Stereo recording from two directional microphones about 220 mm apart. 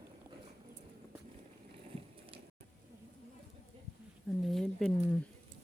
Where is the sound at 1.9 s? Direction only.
25° right (ahead or behind).